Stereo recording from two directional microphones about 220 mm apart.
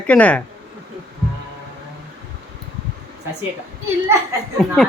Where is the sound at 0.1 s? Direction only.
5° left (ahead or behind).